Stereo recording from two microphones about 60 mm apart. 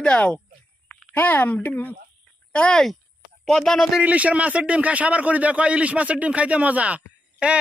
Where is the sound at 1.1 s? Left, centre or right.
Left.